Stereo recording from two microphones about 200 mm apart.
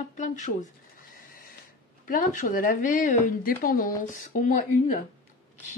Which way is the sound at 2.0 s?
40° left (ahead or behind).